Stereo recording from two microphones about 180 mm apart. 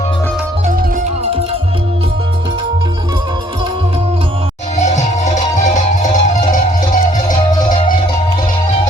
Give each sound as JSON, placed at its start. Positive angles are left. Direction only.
{"t": 4.8, "sound": "music", "side_deg": 40}